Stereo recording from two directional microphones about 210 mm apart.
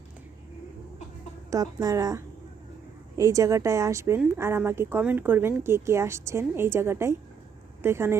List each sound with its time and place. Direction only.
1.5 s speech: 15° right (ahead or behind)